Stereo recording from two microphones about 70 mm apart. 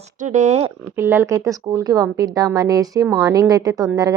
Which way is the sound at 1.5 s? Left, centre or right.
Right.